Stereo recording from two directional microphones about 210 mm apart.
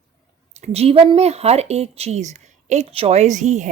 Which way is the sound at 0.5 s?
30° right (ahead or behind).